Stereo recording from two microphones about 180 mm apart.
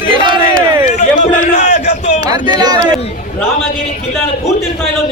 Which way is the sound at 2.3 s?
20° right (ahead or behind).